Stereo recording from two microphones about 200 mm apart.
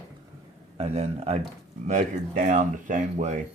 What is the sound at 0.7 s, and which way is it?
Speech, 30° right (ahead or behind).